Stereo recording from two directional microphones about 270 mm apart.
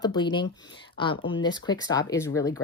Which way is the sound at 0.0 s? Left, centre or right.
Centre.